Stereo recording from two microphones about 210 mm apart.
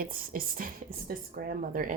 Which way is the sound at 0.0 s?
40° right (ahead or behind).